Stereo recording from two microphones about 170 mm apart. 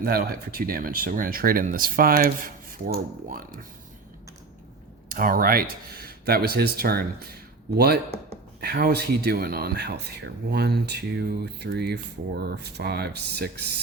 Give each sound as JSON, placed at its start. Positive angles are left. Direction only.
{"t": 0.0, "sound": "speech", "side_deg": -60}
{"t": 5.0, "sound": "speech", "side_deg": -55}